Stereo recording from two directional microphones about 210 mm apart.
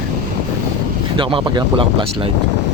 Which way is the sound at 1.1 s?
20° right (ahead or behind).